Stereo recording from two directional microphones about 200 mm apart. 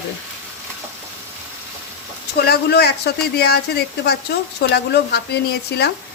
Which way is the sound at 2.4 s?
55° left (ahead or behind).